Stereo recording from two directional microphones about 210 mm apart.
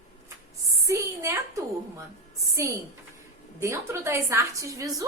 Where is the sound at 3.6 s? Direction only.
15° right (ahead or behind).